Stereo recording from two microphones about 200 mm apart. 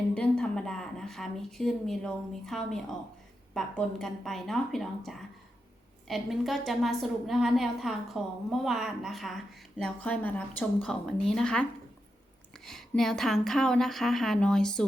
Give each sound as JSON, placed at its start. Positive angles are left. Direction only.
{"t": 0.1, "sound": "a woman's voice", "side_deg": 5}
{"t": 12.6, "sound": "a woman's voice", "side_deg": 0}